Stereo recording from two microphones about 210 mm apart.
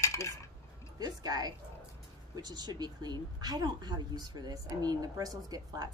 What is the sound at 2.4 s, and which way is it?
A woman's voice, 20° right (ahead or behind).